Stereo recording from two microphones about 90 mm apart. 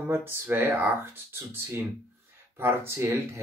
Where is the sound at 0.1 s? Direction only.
25° right (ahead or behind).